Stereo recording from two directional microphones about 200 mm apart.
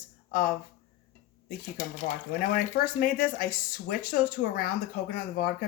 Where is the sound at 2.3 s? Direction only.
45° left (ahead or behind).